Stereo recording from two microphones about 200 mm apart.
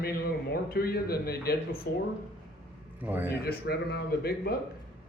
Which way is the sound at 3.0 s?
10° right (ahead or behind).